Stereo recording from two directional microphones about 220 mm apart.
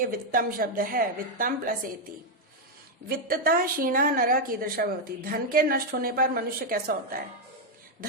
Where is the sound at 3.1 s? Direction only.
40° right (ahead or behind).